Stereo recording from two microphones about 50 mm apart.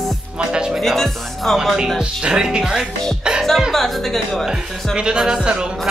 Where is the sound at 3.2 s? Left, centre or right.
Centre.